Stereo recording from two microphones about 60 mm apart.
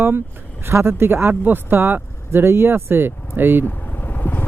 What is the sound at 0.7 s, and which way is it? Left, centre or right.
Speech, right.